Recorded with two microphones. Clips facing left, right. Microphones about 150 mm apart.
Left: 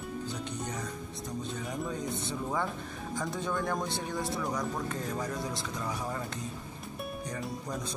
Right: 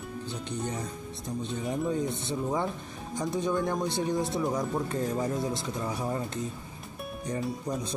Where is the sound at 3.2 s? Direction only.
20° right (ahead or behind).